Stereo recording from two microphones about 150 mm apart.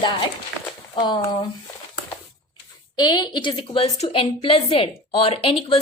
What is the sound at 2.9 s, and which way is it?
A woman's voice, 30° left (ahead or behind).